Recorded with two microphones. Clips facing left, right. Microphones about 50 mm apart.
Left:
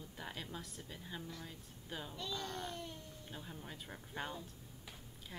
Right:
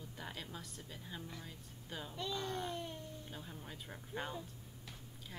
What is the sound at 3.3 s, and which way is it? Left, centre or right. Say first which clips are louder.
Speech: even; centre.